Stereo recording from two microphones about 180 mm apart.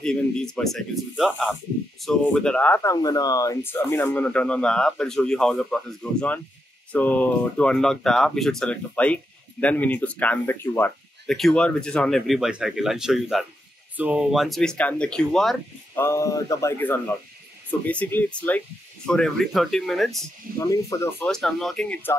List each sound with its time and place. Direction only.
0.0 s speech: 5° left (ahead or behind)
11.2 s speech: centre (ahead or behind)
16.0 s speech: 15° left (ahead or behind); by 20.1 s centre (ahead or behind)
20.5 s speech: 15° left (ahead or behind)
21.3 s speech: centre (ahead or behind)